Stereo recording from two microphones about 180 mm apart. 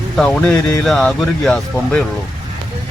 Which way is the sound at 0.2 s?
10° left (ahead or behind).